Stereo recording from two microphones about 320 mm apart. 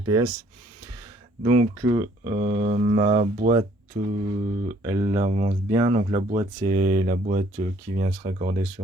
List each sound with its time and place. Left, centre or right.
0.0 s speech: centre
1.4 s speech: centre
4.8 s speech: centre